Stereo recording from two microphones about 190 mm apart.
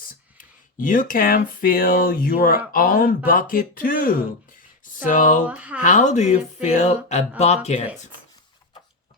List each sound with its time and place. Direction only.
0.1 s speech: 45° left (ahead or behind)
5.5 s speech: 10° right (ahead or behind)
5.8 s speech: 40° left (ahead or behind)